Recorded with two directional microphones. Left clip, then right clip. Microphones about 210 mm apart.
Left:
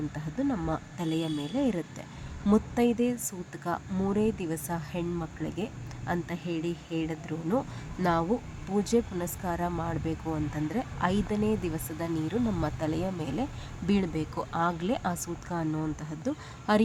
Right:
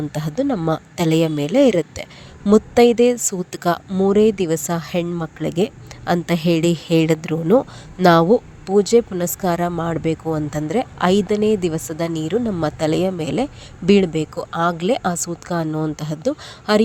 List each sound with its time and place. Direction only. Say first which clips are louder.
0.1 s speech: right 11 dB; 45° right (ahead or behind)
3.9 s speech: right 17 dB; 30° right (ahead or behind)
4.2 s speech: right 14 dB; 40° right (ahead or behind)